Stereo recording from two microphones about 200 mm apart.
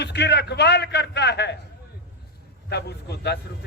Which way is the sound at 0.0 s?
55° left (ahead or behind).